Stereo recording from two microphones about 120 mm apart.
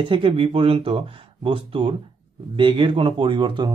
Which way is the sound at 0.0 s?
45° right (ahead or behind).